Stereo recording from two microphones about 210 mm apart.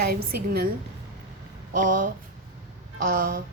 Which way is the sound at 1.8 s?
40° right (ahead or behind).